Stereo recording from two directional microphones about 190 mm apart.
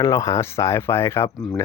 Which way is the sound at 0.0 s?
15° left (ahead or behind).